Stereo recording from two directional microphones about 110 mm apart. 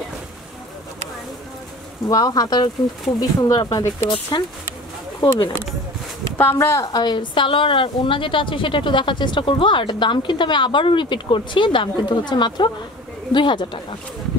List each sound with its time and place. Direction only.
2.0 s speech: 35° left (ahead or behind)
4.3 s a woman's voice: 45° left (ahead or behind)
6.5 s a woman's voice: 30° left (ahead or behind); by 13.9 s 45° left (ahead or behind)